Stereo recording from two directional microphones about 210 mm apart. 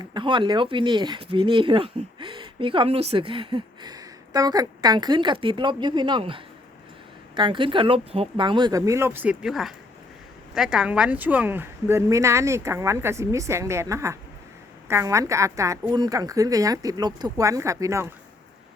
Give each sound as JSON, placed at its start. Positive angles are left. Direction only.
{"t": 0.0, "sound": "a woman's voice", "side_deg": -20}